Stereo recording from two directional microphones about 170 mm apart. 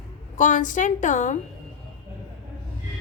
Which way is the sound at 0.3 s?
45° left (ahead or behind).